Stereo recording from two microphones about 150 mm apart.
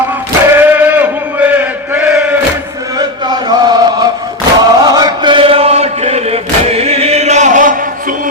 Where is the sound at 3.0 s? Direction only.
25° right (ahead or behind).